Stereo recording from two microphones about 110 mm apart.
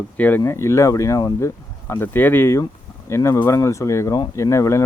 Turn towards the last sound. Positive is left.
turn(degrees=25)  # may be behind; listen again after turning